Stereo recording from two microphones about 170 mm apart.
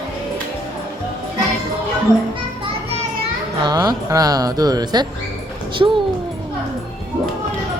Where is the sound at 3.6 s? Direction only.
20° right (ahead or behind).